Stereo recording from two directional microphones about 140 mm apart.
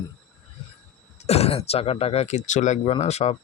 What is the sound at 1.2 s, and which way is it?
Speech, 45° left (ahead or behind).